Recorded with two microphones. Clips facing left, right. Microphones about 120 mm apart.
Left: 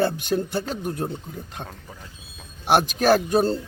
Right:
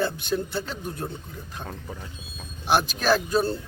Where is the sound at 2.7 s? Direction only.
50° left (ahead or behind).